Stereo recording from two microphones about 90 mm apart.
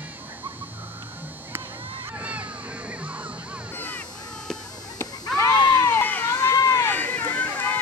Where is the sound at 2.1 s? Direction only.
15° right (ahead or behind).